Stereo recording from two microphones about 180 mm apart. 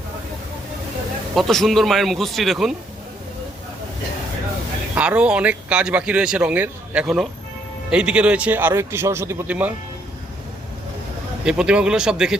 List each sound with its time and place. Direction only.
1.4 s speech: centre (ahead or behind)
4.9 s speech: 5° right (ahead or behind)
11.4 s speech: 5° right (ahead or behind)